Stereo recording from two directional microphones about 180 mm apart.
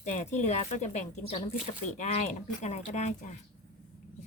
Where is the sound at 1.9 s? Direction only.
40° left (ahead or behind).